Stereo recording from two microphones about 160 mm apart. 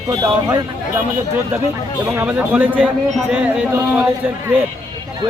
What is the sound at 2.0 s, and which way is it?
A man's voice, 10° right (ahead or behind).